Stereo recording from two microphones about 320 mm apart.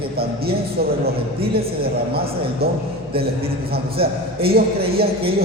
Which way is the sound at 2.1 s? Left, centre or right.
Right.